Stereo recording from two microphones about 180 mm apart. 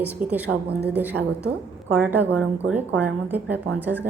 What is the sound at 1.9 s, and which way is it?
A woman's voice, 10° right (ahead or behind).